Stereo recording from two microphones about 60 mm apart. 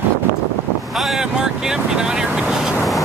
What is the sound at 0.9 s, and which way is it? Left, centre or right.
Speech, centre.